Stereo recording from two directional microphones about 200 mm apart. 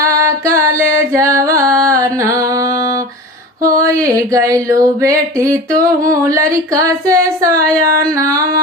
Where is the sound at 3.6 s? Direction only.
15° right (ahead or behind).